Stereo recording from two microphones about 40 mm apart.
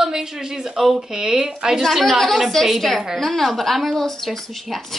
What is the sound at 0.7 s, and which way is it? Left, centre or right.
A woman's voice, centre.